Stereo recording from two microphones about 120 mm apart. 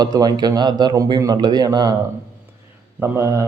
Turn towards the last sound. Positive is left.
turn(degrees=-25)  # may be behind; listen again after turning